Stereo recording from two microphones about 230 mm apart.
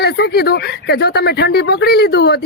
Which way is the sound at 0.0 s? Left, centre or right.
Left.